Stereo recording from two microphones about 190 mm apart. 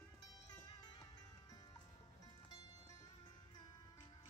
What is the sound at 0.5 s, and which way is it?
Music, 20° left (ahead or behind).